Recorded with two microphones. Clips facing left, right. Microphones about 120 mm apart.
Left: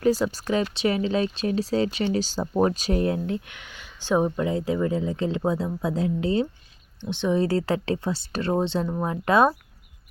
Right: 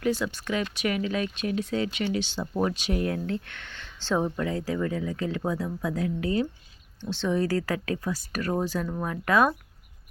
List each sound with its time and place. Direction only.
0.0 s speech: 40° left (ahead or behind)
3.2 s speech: 15° left (ahead or behind)